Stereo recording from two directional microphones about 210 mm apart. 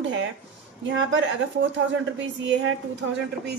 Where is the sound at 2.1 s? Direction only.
60° right (ahead or behind).